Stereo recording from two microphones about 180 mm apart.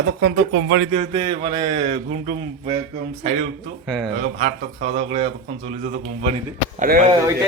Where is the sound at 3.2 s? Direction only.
45° right (ahead or behind).